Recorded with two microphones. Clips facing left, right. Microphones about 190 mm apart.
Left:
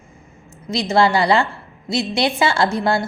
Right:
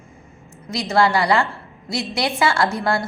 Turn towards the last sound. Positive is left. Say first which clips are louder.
# left 2 dB
turn(degrees=25)  # may be behind; listen again after turning